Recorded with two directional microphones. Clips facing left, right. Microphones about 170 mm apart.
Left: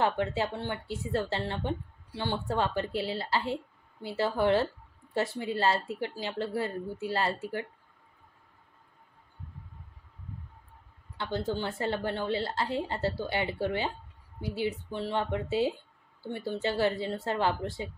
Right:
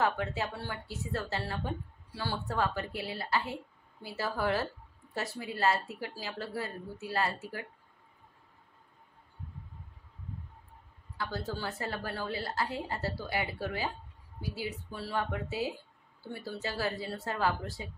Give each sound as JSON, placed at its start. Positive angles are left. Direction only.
{"t": 0.0, "sound": "speech", "side_deg": 30}
{"t": 11.1, "sound": "speech", "side_deg": 25}